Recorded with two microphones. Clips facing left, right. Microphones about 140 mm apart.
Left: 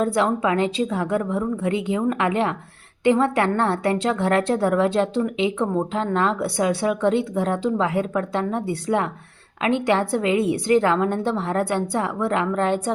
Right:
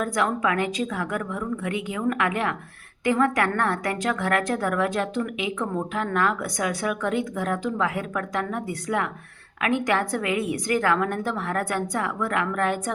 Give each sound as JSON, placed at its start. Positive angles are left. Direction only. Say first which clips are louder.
{"t": 0.0, "sound": "a woman's voice", "louder": "left 4 dB", "side_deg": 25}